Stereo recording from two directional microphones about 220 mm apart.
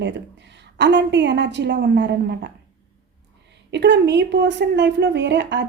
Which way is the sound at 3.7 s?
50° right (ahead or behind).